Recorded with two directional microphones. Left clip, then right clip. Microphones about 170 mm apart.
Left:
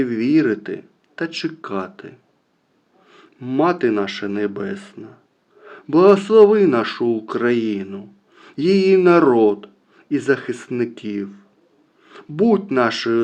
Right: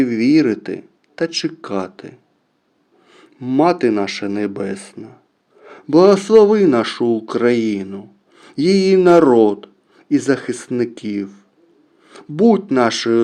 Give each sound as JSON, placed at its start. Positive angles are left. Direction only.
{"t": 0.0, "sound": "a man's voice", "side_deg": -45}